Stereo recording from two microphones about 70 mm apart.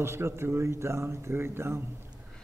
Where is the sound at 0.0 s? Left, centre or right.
Right.